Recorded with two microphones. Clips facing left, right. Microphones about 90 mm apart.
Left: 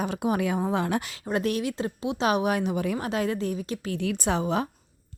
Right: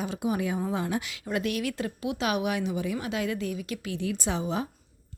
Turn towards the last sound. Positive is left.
turn(degrees=65)  # may be behind; listen again after turning